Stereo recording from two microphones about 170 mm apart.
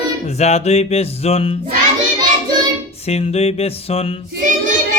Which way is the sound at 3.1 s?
40° left (ahead or behind).